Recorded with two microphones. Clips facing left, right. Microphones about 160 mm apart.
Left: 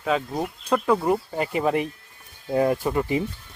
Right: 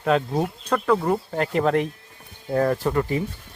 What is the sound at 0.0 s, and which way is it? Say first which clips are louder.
Speech: right 3 dB; centre (ahead or behind).